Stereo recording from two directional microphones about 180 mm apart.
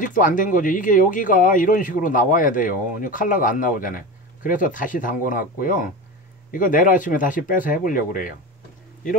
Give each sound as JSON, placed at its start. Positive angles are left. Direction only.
{"t": 0.0, "sound": "speech", "side_deg": 45}